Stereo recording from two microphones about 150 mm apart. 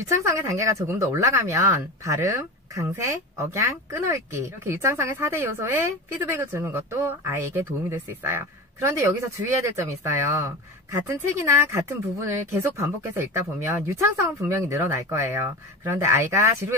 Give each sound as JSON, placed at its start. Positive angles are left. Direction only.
{"t": 0.2, "sound": "speech", "side_deg": -20}